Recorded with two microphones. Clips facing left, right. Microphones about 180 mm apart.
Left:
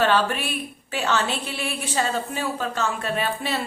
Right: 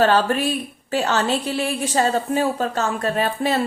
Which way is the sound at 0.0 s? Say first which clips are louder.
Right 4 dB; 40° right (ahead or behind).